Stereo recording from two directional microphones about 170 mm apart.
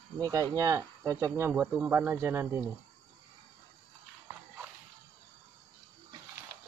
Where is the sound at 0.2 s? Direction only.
20° right (ahead or behind).